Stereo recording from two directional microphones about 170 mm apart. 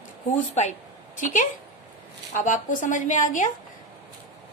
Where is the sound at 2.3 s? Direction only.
50° left (ahead or behind).